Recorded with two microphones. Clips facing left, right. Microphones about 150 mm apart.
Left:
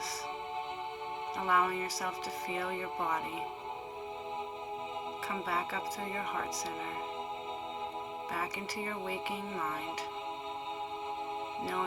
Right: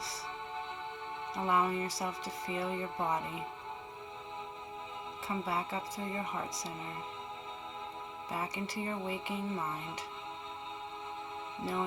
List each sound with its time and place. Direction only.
1.4 s a woman's voice: 25° right (ahead or behind)
5.3 s a woman's voice: 20° right (ahead or behind)
8.3 s a woman's voice: 20° right (ahead or behind)